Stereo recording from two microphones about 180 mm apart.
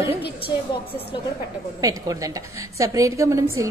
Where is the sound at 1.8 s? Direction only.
20° right (ahead or behind).